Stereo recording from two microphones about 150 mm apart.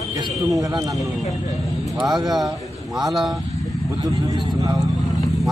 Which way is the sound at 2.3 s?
Centre (ahead or behind).